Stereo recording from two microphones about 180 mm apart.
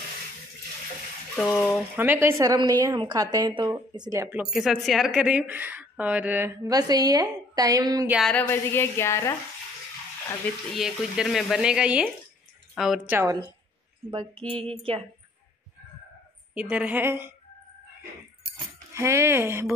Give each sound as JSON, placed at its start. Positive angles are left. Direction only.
{"t": 1.3, "sound": "frying", "side_deg": 0}
{"t": 2.0, "sound": "a woman's voice", "side_deg": -10}
{"t": 8.1, "sound": "a woman's voice", "side_deg": 0}
{"t": 10.7, "sound": "speech", "side_deg": 0}
{"t": 13.2, "sound": "a woman's voice", "side_deg": -20}
{"t": 16.5, "sound": "speech", "side_deg": -5}
{"t": 18.9, "sound": "speech", "side_deg": -15}